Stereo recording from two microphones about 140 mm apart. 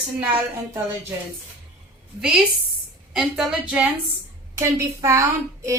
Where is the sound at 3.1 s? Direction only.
5° right (ahead or behind).